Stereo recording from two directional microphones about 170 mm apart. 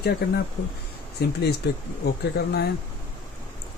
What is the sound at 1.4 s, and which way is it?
Speech, 70° left (ahead or behind).